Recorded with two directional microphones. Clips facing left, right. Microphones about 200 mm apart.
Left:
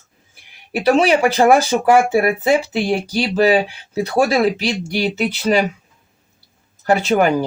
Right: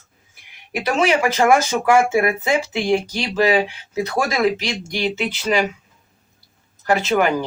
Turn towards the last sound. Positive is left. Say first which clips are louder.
# left 3 dB
turn(degrees=35)  # may be behind; listen again after turning